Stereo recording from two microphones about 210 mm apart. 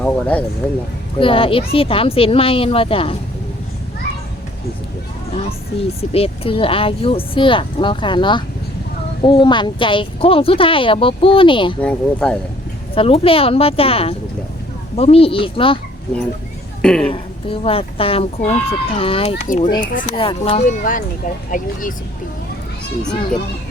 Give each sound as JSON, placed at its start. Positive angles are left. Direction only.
{"t": 0.0, "sound": "speech", "side_deg": 5}
{"t": 1.2, "sound": "speech", "side_deg": 25}
{"t": 6.1, "sound": "speech", "side_deg": 25}
{"t": 11.8, "sound": "speech", "side_deg": 5}
{"t": 12.9, "sound": "speech", "side_deg": 25}
{"t": 16.8, "sound": "speech", "side_deg": 5}
{"t": 17.1, "sound": "speech", "side_deg": 25}
{"t": 19.5, "sound": "speech", "side_deg": 40}
{"t": 20.1, "sound": "speech", "side_deg": 25}